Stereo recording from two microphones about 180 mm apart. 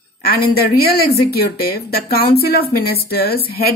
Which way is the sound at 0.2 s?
55° left (ahead or behind).